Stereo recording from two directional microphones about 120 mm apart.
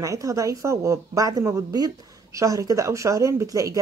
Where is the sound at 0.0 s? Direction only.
25° right (ahead or behind).